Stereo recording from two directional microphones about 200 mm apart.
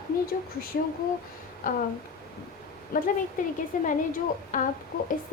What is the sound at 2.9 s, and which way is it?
A woman's voice, 40° left (ahead or behind).